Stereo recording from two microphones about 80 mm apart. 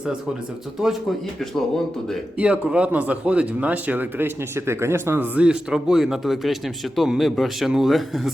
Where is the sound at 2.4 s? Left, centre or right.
Centre; by 5.3 s right.